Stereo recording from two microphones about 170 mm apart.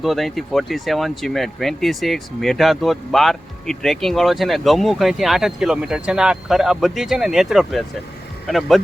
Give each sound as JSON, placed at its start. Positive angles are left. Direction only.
{"t": 0.0, "sound": "speech", "side_deg": 0}